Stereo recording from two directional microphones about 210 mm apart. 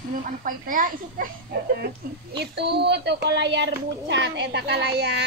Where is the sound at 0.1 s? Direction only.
40° right (ahead or behind).